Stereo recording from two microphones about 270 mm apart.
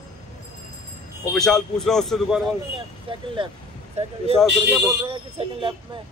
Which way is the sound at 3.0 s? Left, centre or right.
Centre.